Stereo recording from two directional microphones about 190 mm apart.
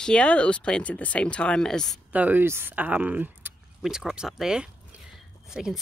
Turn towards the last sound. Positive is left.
turn(degrees=0)  # may be behind; listen again after turning